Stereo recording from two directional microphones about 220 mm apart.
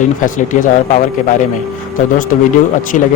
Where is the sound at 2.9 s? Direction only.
30° left (ahead or behind).